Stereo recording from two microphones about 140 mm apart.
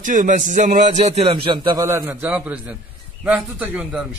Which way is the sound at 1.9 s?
20° right (ahead or behind).